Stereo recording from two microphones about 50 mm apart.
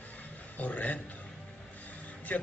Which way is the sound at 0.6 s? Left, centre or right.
Left.